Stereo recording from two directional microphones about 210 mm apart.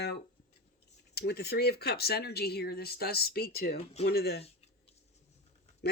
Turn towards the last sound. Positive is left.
turn(degrees=50)  # may be behind; listen again after turning